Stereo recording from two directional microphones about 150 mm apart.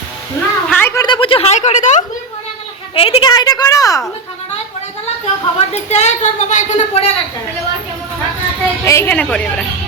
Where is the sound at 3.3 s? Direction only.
25° left (ahead or behind).